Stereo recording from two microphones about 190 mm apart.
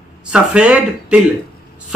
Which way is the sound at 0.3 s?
5° right (ahead or behind).